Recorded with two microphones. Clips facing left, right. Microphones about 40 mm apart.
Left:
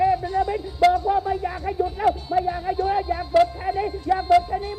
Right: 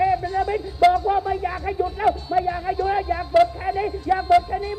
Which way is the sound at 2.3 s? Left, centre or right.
Centre.